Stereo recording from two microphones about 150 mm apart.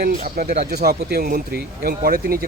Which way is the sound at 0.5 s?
90° right.